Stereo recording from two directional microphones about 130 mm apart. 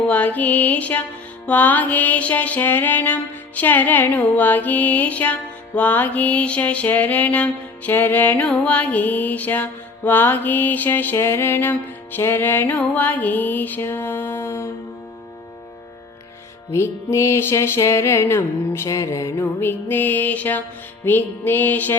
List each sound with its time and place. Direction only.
0.1 s music: 10° left (ahead or behind)
16.7 s music: 20° left (ahead or behind)